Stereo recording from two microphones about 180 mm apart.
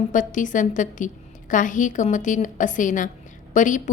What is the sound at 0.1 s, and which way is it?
A woman's voice, 45° left (ahead or behind).